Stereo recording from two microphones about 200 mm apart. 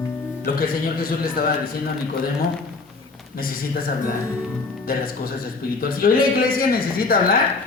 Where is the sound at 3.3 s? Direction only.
45° left (ahead or behind).